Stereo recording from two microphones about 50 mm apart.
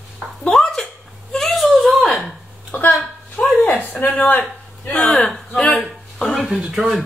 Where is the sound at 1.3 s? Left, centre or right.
Centre.